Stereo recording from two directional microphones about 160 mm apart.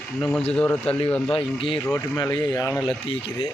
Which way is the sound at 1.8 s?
15° left (ahead or behind).